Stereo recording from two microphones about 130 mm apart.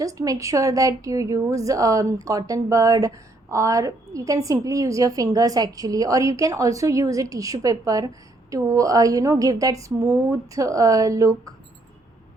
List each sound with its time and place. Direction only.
0.0 s a woman's voice: 25° right (ahead or behind)